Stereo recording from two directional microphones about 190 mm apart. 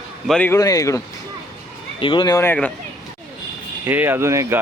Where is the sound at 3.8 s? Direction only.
10° right (ahead or behind).